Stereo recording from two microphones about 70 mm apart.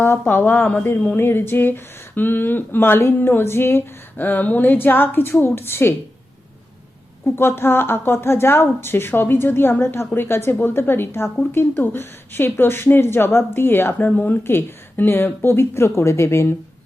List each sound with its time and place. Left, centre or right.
0.0 s a woman's voice: left
7.3 s a woman's voice: left